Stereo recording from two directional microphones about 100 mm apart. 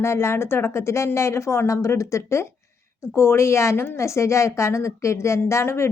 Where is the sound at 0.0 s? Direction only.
25° left (ahead or behind).